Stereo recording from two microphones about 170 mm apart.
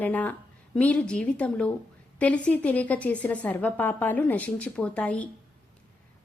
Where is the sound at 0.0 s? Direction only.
10° left (ahead or behind).